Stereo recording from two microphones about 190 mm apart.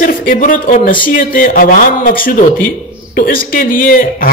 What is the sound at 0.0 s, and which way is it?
A man's voice, 45° left (ahead or behind).